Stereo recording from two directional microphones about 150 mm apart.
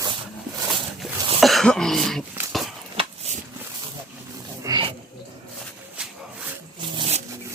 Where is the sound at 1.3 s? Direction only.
Centre (ahead or behind).